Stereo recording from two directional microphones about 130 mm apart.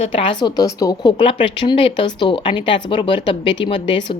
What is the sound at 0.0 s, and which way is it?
A woman's voice, 45° left (ahead or behind).